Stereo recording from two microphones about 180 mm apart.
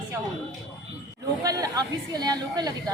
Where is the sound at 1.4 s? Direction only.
20° right (ahead or behind).